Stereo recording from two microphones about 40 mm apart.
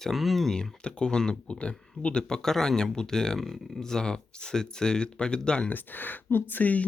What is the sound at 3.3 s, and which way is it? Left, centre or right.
Speech, centre.